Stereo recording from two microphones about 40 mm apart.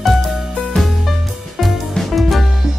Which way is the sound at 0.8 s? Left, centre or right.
Centre.